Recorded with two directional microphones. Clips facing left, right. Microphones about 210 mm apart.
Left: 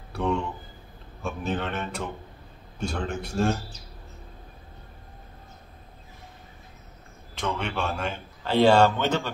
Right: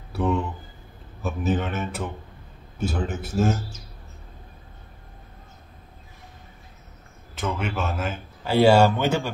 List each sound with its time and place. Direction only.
0.1 s a sound: 5° right (ahead or behind)
1.2 s speech: 5° right (ahead or behind)
7.3 s a man's voice: 5° right (ahead or behind)